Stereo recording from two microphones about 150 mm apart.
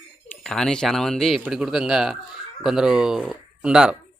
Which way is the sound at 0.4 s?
5° left (ahead or behind).